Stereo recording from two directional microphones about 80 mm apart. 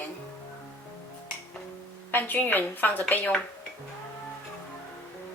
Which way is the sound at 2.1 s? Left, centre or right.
Left.